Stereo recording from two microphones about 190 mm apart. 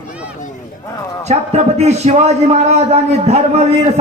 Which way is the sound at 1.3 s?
35° right (ahead or behind).